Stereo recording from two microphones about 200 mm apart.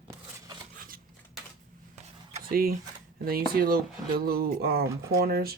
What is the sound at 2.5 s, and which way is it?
Speech, 45° right (ahead or behind).